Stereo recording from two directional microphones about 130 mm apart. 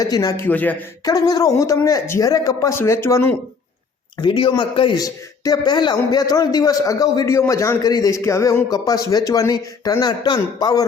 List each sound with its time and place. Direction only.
0.0 s a man's voice: 30° left (ahead or behind)
0.4 s speech: 15° left (ahead or behind)
1.0 s a man's voice: 30° left (ahead or behind)
4.2 s a man's voice: 35° left (ahead or behind)
5.0 s a man's voice: 30° left (ahead or behind)